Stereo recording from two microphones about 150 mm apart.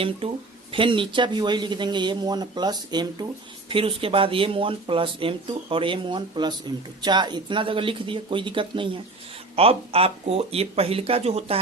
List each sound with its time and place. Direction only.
0.2 s speech: 35° right (ahead or behind)